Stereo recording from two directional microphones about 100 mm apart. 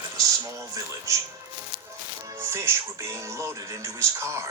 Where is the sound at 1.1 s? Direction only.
30° right (ahead or behind).